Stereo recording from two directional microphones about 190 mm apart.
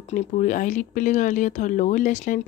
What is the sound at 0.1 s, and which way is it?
Speech, 40° left (ahead or behind).